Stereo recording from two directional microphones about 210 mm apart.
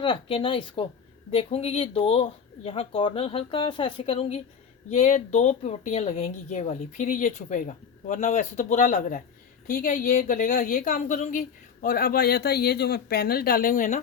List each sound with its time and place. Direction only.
0.0 s a woman's voice: 25° left (ahead or behind)